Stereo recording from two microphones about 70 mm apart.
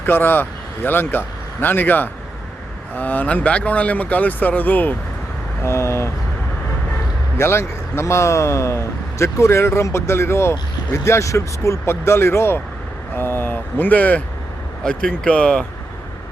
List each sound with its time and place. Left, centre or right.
0.0 s speech: left
5.6 s speech: left
7.3 s speech: left; by 15.6 s centre